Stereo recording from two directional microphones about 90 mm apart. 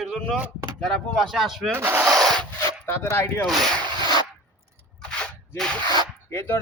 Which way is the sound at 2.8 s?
30° left (ahead or behind).